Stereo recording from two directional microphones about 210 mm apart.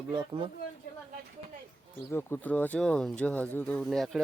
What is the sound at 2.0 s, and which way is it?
Speech, 10° left (ahead or behind).